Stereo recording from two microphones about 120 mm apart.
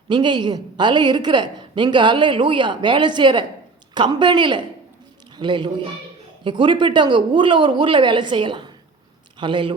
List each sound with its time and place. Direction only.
0.1 s a woman's voice: 40° right (ahead or behind)